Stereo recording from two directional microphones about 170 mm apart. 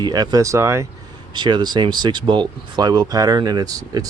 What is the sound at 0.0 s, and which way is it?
Speech, 25° right (ahead or behind).